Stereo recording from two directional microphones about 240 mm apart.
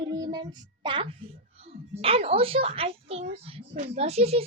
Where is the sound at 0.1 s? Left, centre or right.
Centre.